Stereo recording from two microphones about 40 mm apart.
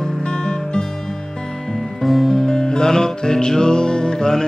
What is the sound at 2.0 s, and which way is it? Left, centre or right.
Music, centre.